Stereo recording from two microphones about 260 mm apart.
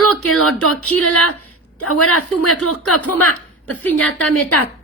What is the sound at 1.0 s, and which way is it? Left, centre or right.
A woman's voice, left.